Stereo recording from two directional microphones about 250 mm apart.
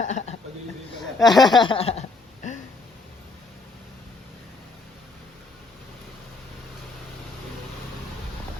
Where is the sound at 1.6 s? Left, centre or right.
Left.